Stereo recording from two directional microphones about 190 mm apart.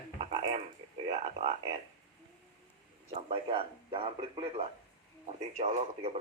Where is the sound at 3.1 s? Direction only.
30° right (ahead or behind).